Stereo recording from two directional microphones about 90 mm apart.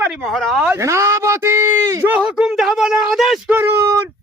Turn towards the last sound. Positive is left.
turn(degrees=-25)  # may be behind; listen again after turning